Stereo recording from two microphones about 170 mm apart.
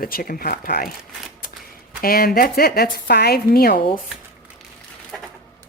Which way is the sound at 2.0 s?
60° left (ahead or behind).